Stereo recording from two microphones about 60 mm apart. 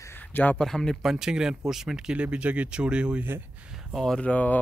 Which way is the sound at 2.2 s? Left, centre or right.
Centre.